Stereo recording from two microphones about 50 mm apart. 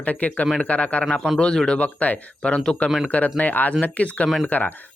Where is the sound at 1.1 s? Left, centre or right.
Centre.